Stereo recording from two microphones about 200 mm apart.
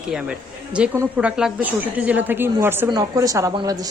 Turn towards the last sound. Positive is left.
turn(degrees=-20)  # may be behind; listen again after turning